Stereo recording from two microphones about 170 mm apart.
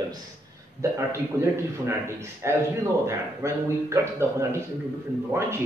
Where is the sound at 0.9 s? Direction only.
15° right (ahead or behind).